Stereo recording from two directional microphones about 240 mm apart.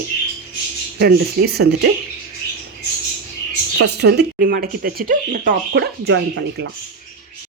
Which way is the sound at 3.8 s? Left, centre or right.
Right.